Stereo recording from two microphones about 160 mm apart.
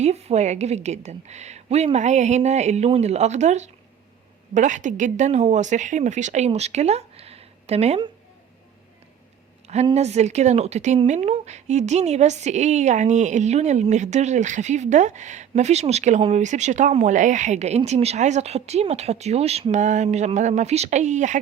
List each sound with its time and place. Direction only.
0.0 s a woman's voice: 45° right (ahead or behind)
9.9 s a woman's voice: 45° right (ahead or behind)